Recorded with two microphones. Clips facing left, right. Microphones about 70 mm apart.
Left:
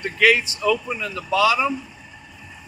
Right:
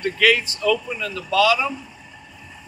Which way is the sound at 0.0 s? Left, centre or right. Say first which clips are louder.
Left 1 dB; centre.